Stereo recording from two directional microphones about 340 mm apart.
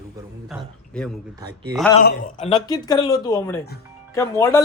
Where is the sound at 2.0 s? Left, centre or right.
Left.